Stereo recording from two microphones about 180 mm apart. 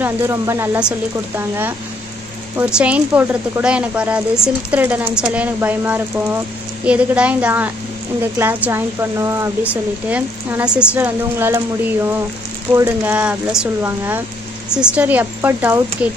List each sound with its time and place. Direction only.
0.0 s speech: 15° right (ahead or behind)